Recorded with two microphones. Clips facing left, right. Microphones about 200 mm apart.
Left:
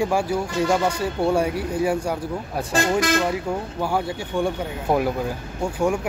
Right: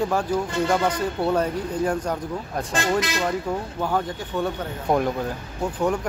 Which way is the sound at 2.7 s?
50° left (ahead or behind).